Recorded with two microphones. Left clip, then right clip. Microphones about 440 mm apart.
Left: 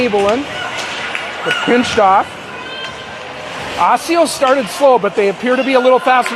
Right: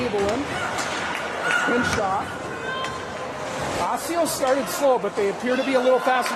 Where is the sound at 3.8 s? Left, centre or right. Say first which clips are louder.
Left 14 dB; left.